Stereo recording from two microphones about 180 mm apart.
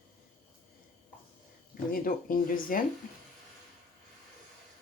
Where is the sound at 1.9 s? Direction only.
50° left (ahead or behind).